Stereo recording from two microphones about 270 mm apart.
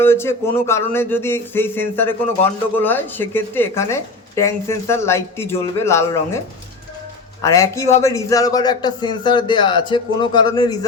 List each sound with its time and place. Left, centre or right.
0.0 s speech: centre
7.4 s speech: centre